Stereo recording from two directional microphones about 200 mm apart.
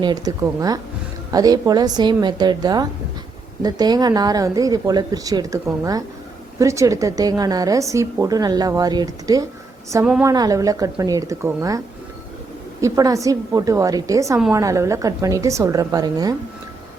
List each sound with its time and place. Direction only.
0.0 s a woman's voice: 20° right (ahead or behind)
12.8 s a woman's voice: 15° right (ahead or behind)